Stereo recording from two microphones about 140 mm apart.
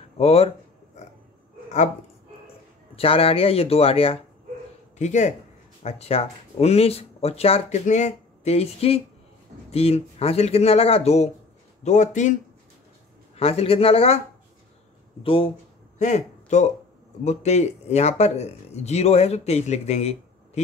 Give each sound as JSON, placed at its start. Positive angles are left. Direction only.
{"t": 0.2, "sound": "speech", "side_deg": 45}
{"t": 3.0, "sound": "speech", "side_deg": 40}
{"t": 4.9, "sound": "speech", "side_deg": 60}
{"t": 7.8, "sound": "speech", "side_deg": 60}
{"t": 11.8, "sound": "speech", "side_deg": 60}
{"t": 13.4, "sound": "speech", "side_deg": 45}
{"t": 15.2, "sound": "speech", "side_deg": 40}
{"t": 16.0, "sound": "a man's voice", "side_deg": 55}